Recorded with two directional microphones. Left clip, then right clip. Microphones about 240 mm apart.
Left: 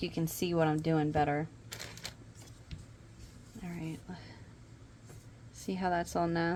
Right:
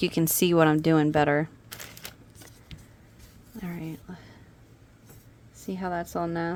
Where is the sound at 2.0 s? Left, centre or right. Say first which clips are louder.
Right 2 dB; right.